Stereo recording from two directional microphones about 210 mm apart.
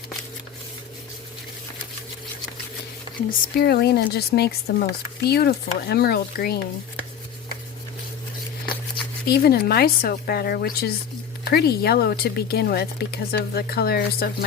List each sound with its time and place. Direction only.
3.2 s speech: 50° left (ahead or behind)
9.2 s speech: 45° left (ahead or behind)